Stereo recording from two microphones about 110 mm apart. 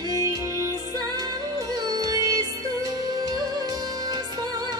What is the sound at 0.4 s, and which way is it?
Music, 30° right (ahead or behind).